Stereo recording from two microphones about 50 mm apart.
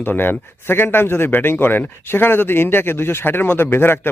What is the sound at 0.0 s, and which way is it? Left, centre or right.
Speech, left.